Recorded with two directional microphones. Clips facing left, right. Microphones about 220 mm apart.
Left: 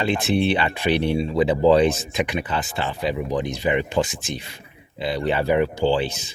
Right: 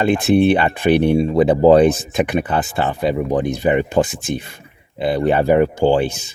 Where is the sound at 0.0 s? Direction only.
50° right (ahead or behind).